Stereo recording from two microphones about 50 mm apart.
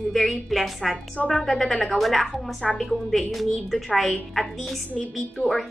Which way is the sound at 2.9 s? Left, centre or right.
Centre.